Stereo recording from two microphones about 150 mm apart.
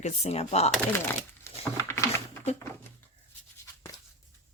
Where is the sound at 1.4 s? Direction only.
15° left (ahead or behind).